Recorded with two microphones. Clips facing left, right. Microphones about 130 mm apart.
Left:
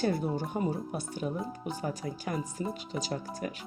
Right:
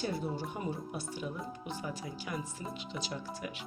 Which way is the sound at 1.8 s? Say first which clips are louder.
Left 5 dB; 45° left (ahead or behind).